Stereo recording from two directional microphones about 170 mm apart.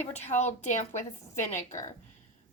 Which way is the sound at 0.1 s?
40° left (ahead or behind).